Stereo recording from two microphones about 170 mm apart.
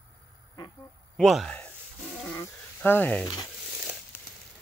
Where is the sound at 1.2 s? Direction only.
Centre (ahead or behind).